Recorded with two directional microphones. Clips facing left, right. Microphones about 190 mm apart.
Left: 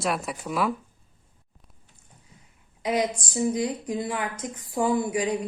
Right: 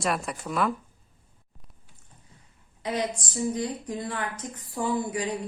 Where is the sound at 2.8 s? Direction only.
15° left (ahead or behind).